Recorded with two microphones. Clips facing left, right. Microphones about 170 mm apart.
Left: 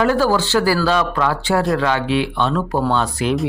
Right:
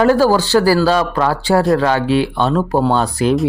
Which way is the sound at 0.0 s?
40° right (ahead or behind).